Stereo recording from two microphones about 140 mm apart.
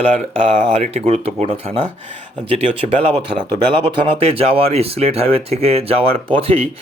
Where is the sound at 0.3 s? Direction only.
45° right (ahead or behind).